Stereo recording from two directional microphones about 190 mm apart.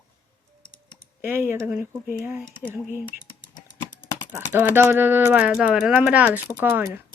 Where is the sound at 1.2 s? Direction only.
10° right (ahead or behind).